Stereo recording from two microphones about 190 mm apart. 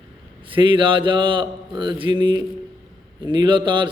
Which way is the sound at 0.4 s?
25° right (ahead or behind).